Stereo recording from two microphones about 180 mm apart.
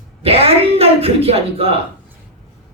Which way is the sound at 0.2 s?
35° right (ahead or behind).